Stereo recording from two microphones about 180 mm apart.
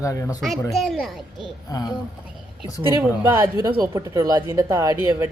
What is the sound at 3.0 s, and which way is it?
Speech, 15° right (ahead or behind).